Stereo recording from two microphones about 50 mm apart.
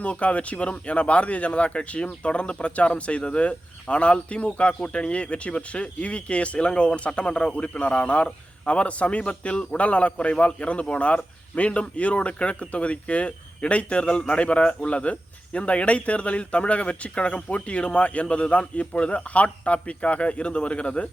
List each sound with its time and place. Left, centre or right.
0.0 s speech: left